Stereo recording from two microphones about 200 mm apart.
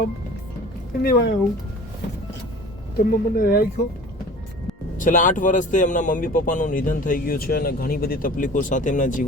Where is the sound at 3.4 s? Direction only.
45° left (ahead or behind).